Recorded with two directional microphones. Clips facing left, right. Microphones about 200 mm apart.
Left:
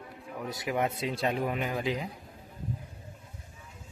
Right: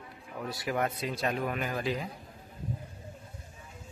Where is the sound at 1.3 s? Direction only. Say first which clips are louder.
Left 1 dB; 25° left (ahead or behind).